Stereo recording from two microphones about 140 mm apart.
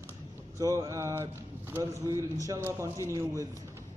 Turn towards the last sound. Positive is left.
turn(degrees=-20)  # may be behind; listen again after turning